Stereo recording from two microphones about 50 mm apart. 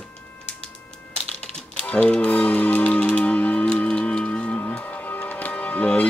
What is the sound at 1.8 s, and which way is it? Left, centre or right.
Music, left.